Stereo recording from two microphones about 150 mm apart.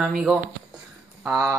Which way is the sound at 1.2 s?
15° right (ahead or behind).